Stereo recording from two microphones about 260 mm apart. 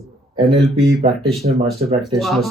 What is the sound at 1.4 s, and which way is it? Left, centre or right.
Speech, right.